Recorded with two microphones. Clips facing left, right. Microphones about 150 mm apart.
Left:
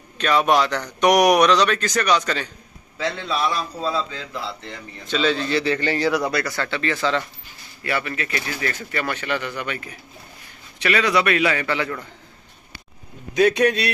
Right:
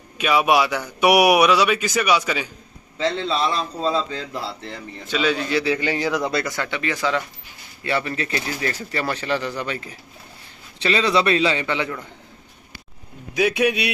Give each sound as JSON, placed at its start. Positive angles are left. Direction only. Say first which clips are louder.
{"t": 0.2, "sound": "a man's voice", "louder": "even", "side_deg": -10}
{"t": 3.1, "sound": "speech", "louder": "right 2 dB", "side_deg": -30}
{"t": 5.0, "sound": "a man's voice", "louder": "left 1 dB", "side_deg": -10}
{"t": 7.8, "sound": "a man's voice", "louder": "right 2 dB", "side_deg": -25}
{"t": 13.3, "sound": "a man's voice", "louder": "left 3 dB", "side_deg": -5}